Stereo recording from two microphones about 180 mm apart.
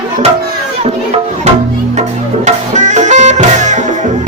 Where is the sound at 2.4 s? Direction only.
40° right (ahead or behind).